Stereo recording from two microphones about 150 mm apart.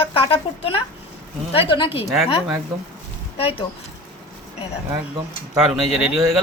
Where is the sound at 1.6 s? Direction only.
35° left (ahead or behind).